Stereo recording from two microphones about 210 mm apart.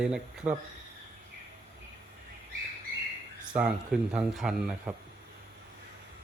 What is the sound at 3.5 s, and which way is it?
Speech, 5° right (ahead or behind).